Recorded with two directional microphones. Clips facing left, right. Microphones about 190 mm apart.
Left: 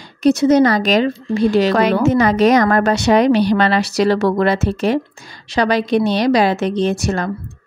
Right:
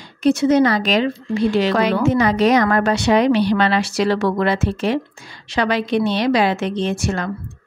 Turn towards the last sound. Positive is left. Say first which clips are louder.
# left 3 dB
turn(degrees=40)  # may be behind; listen again after turning